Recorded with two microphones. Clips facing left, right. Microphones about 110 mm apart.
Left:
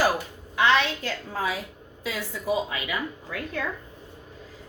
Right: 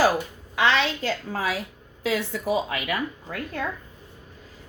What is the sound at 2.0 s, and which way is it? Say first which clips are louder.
Speech: right 3 dB; 75° right (ahead or behind).